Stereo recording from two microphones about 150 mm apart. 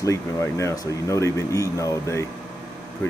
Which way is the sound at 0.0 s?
20° left (ahead or behind).